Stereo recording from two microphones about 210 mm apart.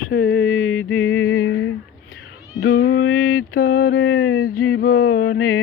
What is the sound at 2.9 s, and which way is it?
Mantra, 75° left (ahead or behind).